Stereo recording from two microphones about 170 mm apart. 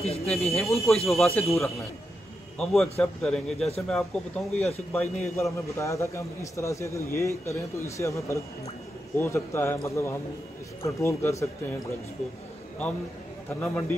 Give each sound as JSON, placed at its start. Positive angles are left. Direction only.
{"t": 0.0, "sound": "speech", "side_deg": 40}
{"t": 0.6, "sound": "a man's voice", "side_deg": 0}
{"t": 5.3, "sound": "a man's voice", "side_deg": 15}
{"t": 13.5, "sound": "a man's voice", "side_deg": 10}